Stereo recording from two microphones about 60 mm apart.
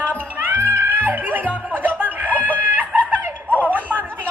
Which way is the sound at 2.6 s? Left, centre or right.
Right.